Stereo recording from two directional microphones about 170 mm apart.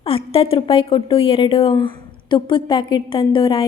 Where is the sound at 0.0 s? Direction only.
35° left (ahead or behind).